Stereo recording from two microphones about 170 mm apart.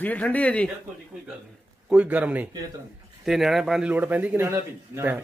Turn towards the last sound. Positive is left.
turn(degrees=-20)  # may be behind; listen again after turning